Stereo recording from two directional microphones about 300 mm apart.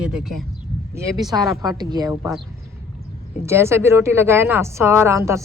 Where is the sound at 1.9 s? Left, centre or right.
Centre.